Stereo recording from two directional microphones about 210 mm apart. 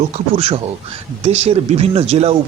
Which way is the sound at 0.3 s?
30° right (ahead or behind).